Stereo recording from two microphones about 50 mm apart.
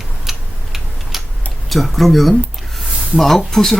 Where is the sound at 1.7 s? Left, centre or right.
Centre.